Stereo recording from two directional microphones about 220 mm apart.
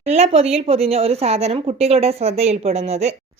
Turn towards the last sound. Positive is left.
turn(degrees=-30)  # may be behind; listen again after turning